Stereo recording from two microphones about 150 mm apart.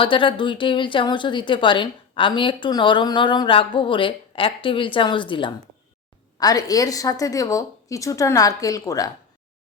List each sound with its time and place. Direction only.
0.0 s a woman's voice: 35° left (ahead or behind)